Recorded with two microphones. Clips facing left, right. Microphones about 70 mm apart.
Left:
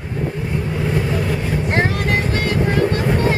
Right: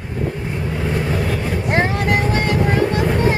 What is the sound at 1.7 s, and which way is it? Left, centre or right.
Vehicle, right.